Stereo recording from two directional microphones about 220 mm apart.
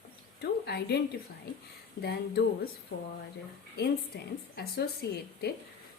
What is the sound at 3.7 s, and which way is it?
A woman's voice, 45° left (ahead or behind).